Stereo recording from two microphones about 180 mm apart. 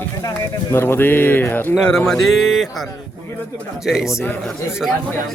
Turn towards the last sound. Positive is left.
turn(degrees=0)  # may be behind; listen again after turning